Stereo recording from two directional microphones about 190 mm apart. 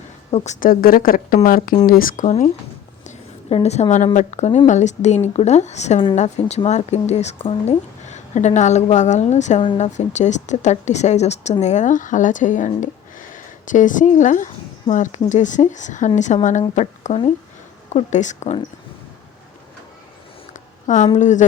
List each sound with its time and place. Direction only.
0.3 s a woman's voice: 35° left (ahead or behind)
20.5 s a sound: 40° left (ahead or behind)
21.2 s speech: 40° left (ahead or behind)